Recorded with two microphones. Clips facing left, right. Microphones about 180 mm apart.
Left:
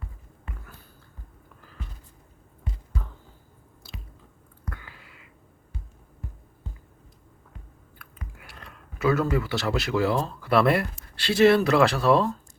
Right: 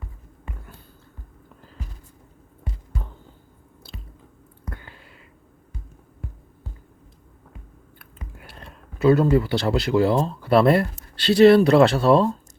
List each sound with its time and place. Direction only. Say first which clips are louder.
7.9 s speech: right 2 dB; 25° right (ahead or behind)